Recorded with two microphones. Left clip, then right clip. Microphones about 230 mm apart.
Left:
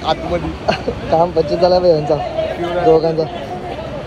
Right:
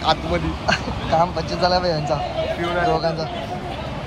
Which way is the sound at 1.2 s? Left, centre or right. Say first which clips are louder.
Left 8 dB; right.